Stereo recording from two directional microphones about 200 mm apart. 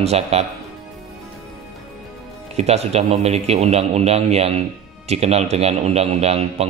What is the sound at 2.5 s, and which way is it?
A man's voice, 30° right (ahead or behind).